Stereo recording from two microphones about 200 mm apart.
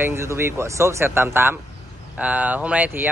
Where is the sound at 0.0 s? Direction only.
15° right (ahead or behind).